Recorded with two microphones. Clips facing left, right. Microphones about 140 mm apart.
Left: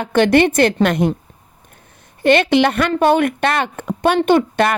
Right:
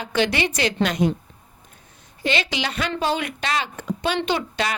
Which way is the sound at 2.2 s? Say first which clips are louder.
Left 12 dB; 55° left (ahead or behind).